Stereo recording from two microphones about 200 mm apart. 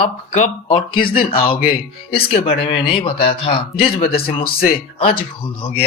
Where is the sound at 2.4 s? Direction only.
30° left (ahead or behind).